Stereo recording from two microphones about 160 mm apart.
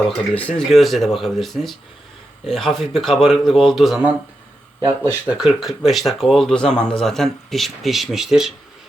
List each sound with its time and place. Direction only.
0.1 s speech: 5° left (ahead or behind)
4.8 s speech: 15° right (ahead or behind)